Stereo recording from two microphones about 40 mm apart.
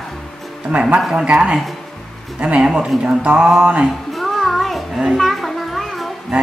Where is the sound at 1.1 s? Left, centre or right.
Right.